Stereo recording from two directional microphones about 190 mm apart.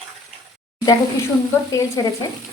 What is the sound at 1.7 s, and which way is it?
Stir, 15° left (ahead or behind).